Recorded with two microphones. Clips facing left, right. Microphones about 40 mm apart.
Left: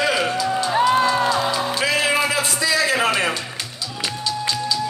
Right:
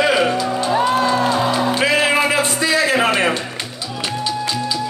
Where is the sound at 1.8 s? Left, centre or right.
Right.